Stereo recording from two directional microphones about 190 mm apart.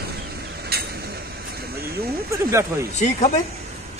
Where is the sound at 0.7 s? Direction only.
55° right (ahead or behind).